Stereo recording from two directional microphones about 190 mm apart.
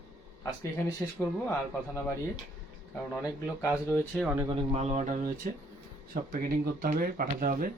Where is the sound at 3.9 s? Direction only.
5° left (ahead or behind).